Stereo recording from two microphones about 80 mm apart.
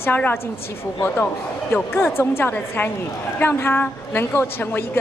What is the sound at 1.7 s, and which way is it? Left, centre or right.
A woman's voice, left.